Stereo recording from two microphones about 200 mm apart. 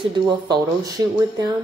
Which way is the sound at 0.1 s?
20° right (ahead or behind).